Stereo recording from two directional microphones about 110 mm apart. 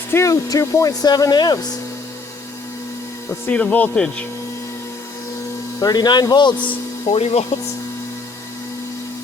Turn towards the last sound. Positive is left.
turn(degrees=70)  # may be behind; listen again after turning